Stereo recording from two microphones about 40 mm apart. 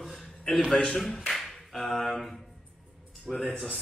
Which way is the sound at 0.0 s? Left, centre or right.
Centre.